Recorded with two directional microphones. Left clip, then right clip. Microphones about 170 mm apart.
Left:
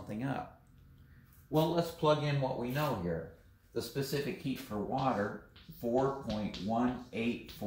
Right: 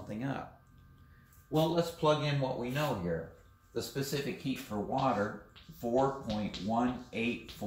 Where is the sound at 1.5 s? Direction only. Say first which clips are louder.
Right 1 dB; 10° left (ahead or behind).